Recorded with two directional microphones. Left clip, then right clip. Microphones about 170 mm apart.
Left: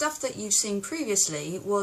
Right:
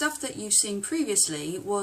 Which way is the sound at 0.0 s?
5° right (ahead or behind).